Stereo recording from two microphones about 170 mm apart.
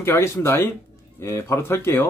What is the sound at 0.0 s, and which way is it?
Speech, 15° left (ahead or behind).